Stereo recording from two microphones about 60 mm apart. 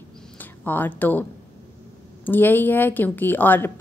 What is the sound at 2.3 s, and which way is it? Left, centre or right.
A woman's voice, left.